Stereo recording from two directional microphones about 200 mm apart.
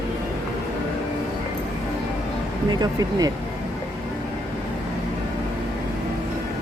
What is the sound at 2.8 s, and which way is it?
Speech, 20° right (ahead or behind).